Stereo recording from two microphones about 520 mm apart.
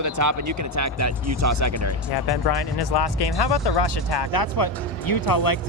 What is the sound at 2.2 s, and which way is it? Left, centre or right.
Speech, left.